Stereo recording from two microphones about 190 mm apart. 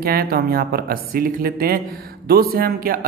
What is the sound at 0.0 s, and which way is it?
A man's voice, 50° right (ahead or behind).